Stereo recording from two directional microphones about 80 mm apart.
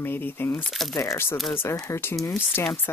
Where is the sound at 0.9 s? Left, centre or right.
Left.